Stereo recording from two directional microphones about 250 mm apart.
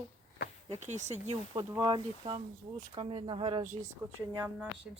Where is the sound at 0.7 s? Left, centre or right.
Right.